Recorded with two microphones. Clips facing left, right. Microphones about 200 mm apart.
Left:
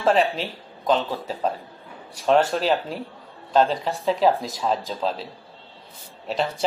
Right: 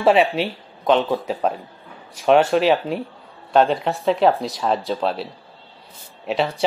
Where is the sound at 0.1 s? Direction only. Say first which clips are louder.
Right 2 dB; 70° right (ahead or behind).